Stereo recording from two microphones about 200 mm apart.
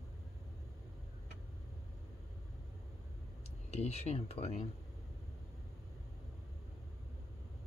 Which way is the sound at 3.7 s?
30° left (ahead or behind).